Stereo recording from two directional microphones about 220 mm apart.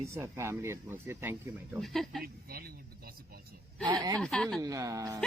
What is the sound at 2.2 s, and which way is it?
Speech, 45° right (ahead or behind).